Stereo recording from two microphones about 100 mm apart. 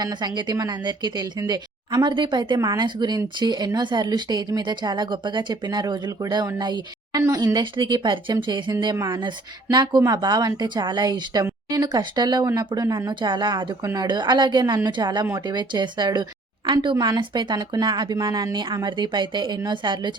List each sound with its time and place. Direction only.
0.0 s speech: 45° right (ahead or behind)
2.6 s speech: 40° right (ahead or behind)
13.1 s speech: 50° right (ahead or behind)